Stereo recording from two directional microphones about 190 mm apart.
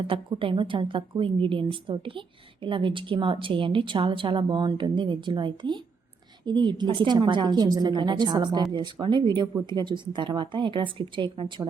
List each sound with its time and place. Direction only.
0.0 s a woman's voice: 30° right (ahead or behind)